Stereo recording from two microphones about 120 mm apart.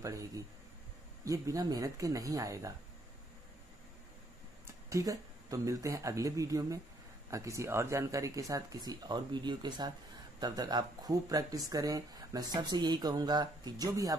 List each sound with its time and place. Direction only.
0.0 s speech: 25° right (ahead or behind)
4.8 s speech: 25° right (ahead or behind)